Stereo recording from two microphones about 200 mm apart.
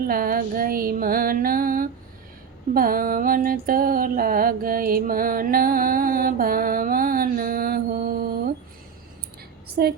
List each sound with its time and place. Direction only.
0.1 s music: 45° right (ahead or behind)
9.8 s music: 50° right (ahead or behind)